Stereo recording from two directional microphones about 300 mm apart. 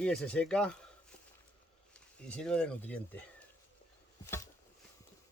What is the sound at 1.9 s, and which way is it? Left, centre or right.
Speech, centre.